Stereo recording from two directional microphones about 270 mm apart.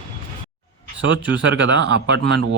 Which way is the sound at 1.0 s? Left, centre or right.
Right.